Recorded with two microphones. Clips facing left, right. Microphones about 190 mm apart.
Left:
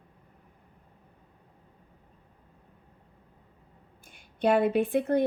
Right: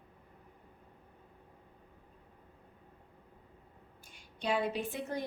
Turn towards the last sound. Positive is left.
turn(degrees=60)  # may be behind; listen again after turning